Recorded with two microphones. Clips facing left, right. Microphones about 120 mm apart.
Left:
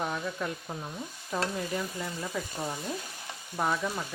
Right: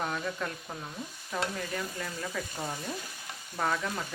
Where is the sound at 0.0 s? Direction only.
10° left (ahead or behind).